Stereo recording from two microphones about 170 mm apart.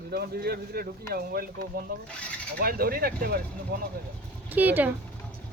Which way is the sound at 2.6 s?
60° right (ahead or behind).